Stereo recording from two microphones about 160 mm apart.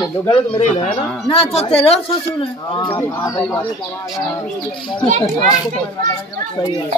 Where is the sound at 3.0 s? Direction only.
15° left (ahead or behind).